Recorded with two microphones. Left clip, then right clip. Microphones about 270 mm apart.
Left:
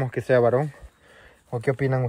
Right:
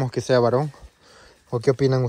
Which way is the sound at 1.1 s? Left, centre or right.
Right.